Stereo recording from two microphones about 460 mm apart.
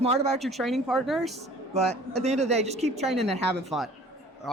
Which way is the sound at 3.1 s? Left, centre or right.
Centre.